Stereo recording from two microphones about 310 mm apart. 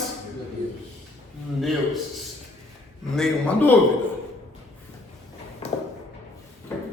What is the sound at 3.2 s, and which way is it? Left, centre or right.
Speech, centre.